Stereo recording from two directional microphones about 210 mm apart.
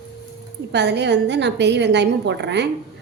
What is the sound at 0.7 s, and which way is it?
A woman's voice, 55° right (ahead or behind).